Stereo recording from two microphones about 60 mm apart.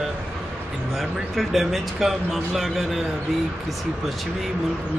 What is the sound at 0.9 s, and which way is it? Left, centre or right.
Speech, centre.